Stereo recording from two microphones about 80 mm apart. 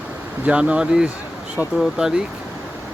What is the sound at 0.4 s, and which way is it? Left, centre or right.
Speech, centre.